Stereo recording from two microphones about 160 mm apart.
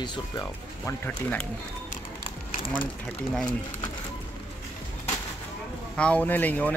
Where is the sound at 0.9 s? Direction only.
10° left (ahead or behind).